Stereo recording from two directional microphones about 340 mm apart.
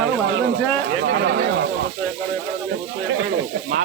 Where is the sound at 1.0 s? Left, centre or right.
Right.